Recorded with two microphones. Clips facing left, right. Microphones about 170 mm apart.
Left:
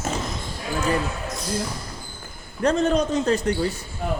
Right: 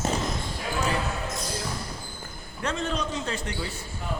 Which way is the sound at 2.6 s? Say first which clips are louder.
Left 9 dB; 40° left (ahead or behind).